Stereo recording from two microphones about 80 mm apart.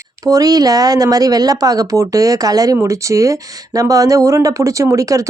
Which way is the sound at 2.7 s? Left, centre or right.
Right.